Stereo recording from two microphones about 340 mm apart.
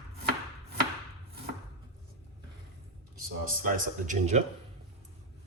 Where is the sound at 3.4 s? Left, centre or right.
Right.